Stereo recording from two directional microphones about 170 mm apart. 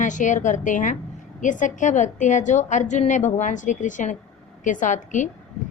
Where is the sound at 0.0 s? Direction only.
50° left (ahead or behind).